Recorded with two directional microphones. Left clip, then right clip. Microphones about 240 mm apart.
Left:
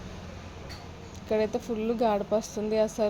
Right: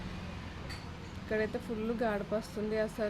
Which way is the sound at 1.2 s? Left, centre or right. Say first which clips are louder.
Left 7 dB; centre.